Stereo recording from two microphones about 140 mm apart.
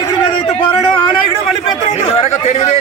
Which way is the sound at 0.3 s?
35° left (ahead or behind).